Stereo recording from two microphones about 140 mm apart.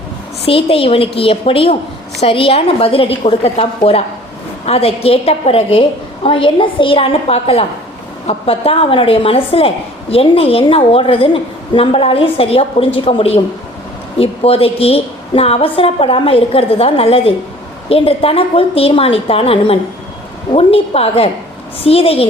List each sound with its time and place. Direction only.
0.4 s a woman's voice: 40° left (ahead or behind)